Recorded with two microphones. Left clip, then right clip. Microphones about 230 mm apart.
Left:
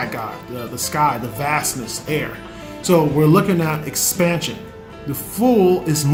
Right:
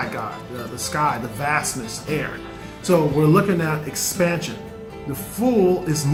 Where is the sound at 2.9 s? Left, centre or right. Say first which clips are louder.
Left 3 dB; left.